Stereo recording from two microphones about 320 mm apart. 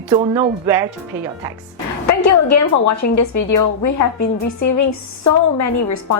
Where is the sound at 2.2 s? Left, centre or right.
Left.